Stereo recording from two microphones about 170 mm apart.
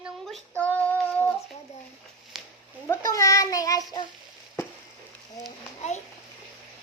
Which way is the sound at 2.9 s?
15° left (ahead or behind).